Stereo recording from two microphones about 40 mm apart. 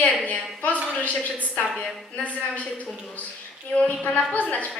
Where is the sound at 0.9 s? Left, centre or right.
Left.